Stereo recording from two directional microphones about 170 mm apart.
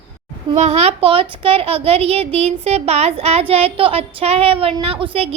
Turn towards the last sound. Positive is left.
turn(degrees=-35)  # may be behind; listen again after turning